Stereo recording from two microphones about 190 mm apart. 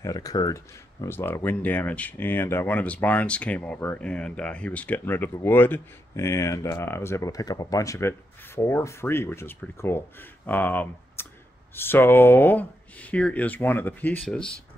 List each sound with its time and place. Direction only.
0.0 s speech: 20° left (ahead or behind)